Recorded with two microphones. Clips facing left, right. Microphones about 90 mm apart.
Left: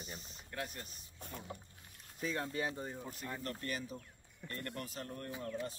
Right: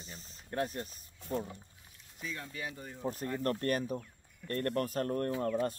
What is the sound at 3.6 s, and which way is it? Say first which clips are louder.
Speech: right 9 dB; 50° right (ahead or behind).